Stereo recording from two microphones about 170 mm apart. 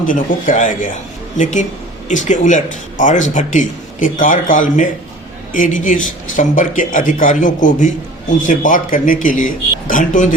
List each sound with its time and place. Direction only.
0.0 s speech: 50° left (ahead or behind)